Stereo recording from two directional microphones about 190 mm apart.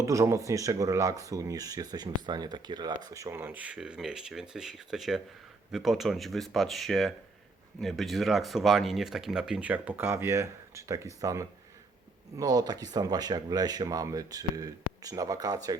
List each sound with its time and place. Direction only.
0.0 s speech: 15° right (ahead or behind)